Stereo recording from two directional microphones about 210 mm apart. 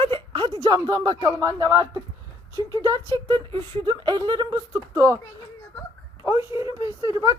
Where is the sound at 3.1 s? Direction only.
20° right (ahead or behind).